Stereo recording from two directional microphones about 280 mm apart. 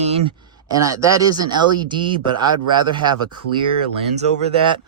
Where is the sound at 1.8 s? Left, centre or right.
Centre.